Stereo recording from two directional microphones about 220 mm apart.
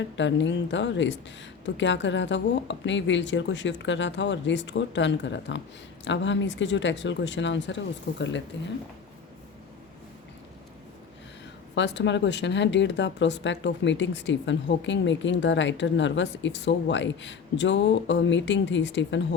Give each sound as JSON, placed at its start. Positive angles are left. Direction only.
{"t": 0.2, "sound": "speech", "side_deg": 55}
{"t": 11.7, "sound": "speech", "side_deg": 55}